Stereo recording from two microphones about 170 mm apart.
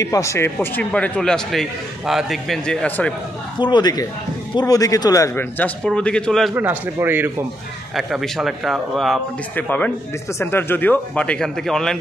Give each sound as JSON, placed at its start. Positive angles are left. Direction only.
{"t": 0.0, "sound": "a man's voice", "side_deg": 20}
{"t": 3.5, "sound": "a man's voice", "side_deg": 25}
{"t": 6.5, "sound": "a man's voice", "side_deg": -10}
{"t": 7.9, "sound": "a man's voice", "side_deg": 0}